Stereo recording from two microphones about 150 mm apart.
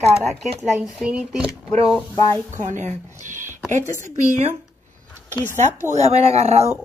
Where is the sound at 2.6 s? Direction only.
50° right (ahead or behind).